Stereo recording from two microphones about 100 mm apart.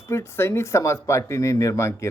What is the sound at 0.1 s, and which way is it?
Speech, 25° left (ahead or behind).